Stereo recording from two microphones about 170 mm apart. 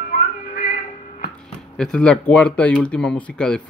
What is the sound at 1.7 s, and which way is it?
Speech, 5° left (ahead or behind).